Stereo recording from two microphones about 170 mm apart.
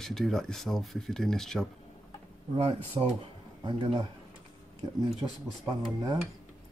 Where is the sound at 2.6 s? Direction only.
30° right (ahead or behind).